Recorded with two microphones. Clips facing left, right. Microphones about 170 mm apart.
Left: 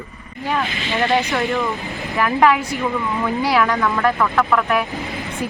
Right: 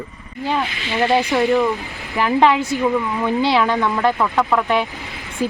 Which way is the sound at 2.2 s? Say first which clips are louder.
Right 1 dB; 25° right (ahead or behind).